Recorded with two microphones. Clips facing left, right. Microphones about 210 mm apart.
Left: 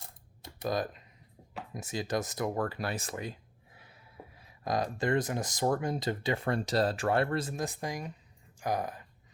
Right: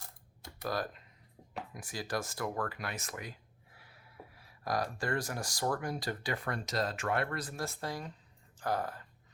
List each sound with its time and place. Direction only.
0.4 s computer keyboard: 20° left (ahead or behind)
1.7 s speech: 25° left (ahead or behind)